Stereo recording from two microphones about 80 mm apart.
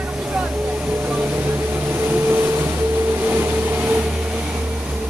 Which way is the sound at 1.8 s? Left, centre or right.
Right.